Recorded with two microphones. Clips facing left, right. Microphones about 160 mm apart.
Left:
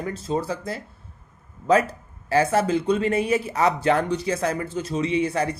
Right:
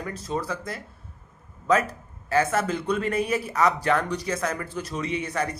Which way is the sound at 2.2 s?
30° left (ahead or behind).